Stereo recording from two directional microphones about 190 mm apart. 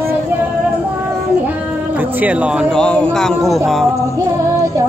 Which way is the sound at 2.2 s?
10° right (ahead or behind).